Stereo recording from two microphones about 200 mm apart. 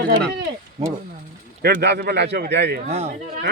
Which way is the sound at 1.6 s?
55° right (ahead or behind).